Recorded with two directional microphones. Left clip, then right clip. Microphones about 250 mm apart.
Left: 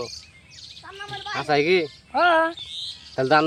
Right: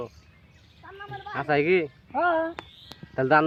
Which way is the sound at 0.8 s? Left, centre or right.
Left.